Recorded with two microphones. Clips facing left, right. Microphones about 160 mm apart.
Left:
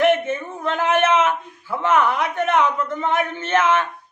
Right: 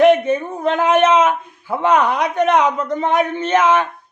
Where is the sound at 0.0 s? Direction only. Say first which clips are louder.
Right 6 dB; 15° right (ahead or behind).